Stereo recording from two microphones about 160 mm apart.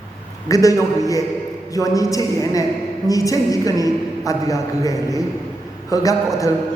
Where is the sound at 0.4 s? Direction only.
20° left (ahead or behind).